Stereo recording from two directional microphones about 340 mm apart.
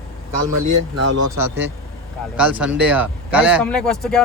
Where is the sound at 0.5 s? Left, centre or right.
Right.